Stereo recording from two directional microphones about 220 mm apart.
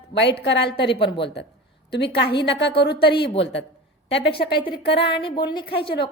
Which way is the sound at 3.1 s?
25° left (ahead or behind).